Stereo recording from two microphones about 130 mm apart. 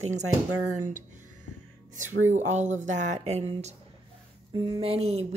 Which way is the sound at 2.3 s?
65° right (ahead or behind).